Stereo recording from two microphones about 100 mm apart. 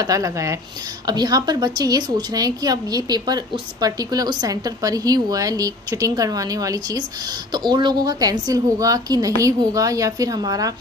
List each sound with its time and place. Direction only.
0.0 s a woman's voice: 35° right (ahead or behind)
1.0 s a woman's voice: 40° right (ahead or behind)